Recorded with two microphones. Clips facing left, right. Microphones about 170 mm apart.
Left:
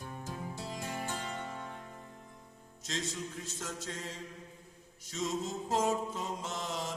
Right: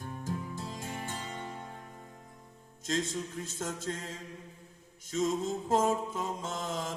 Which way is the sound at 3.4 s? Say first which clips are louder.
Right 5 dB; 50° right (ahead or behind).